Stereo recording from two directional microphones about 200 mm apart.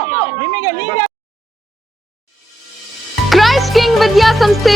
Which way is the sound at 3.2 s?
Centre (ahead or behind).